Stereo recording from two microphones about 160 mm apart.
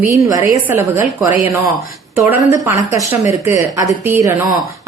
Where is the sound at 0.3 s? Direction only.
20° right (ahead or behind).